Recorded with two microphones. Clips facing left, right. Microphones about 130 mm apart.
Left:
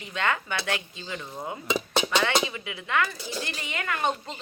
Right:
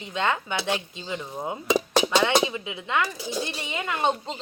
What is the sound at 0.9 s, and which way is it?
Speech, 20° right (ahead or behind).